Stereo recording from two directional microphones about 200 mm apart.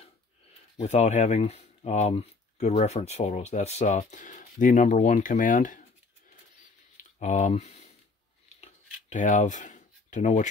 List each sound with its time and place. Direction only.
0.8 s speech: 35° left (ahead or behind)
7.0 s a sound: 35° left (ahead or behind)
8.5 s scissors: 35° left (ahead or behind)
9.1 s speech: 40° left (ahead or behind)